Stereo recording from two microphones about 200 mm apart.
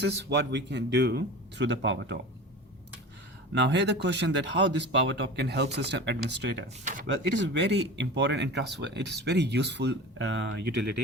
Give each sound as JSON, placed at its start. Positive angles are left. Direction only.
{"t": 0.0, "sound": "speech", "side_deg": -60}
{"t": 3.5, "sound": "speech", "side_deg": -60}